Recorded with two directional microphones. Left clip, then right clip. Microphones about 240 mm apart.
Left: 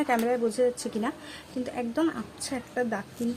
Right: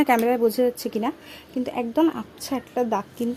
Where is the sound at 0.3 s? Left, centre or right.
Right.